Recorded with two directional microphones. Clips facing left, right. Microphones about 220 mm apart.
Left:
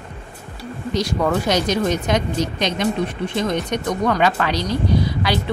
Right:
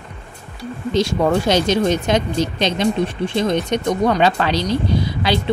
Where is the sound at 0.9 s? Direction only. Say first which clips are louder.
Right 3 dB; 25° right (ahead or behind).